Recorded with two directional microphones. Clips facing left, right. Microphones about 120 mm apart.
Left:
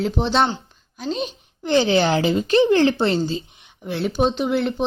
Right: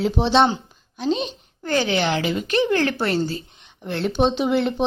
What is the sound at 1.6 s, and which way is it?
Speech, 25° left (ahead or behind).